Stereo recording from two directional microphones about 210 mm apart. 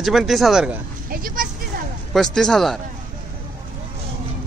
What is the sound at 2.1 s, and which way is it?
Speech, centre (ahead or behind).